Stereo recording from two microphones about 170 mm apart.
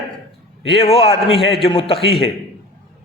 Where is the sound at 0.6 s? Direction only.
35° left (ahead or behind).